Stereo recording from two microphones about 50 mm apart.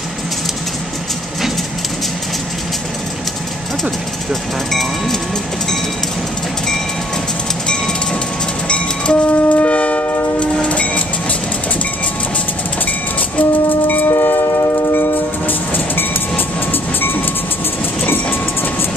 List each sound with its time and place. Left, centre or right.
4.3 s speech: centre
7.6 s train: centre
13.4 s train: left
14.1 s train: left